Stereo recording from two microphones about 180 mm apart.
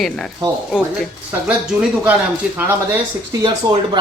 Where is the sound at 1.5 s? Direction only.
5° right (ahead or behind).